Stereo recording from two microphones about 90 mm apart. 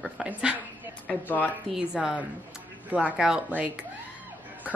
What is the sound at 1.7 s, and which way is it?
A woman's voice, 10° right (ahead or behind).